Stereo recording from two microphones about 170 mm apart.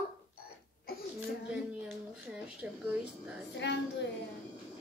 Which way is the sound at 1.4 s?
5° right (ahead or behind).